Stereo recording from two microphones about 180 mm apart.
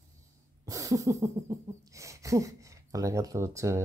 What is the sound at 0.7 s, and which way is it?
Wheeze, 20° right (ahead or behind).